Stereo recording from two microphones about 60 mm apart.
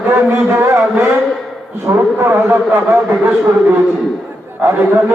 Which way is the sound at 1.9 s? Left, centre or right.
Right.